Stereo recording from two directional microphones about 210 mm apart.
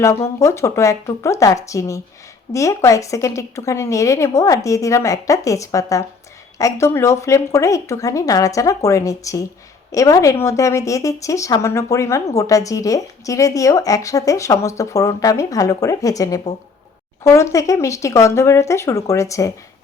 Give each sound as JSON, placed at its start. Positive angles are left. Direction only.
{"t": 0.0, "sound": "speech", "side_deg": 15}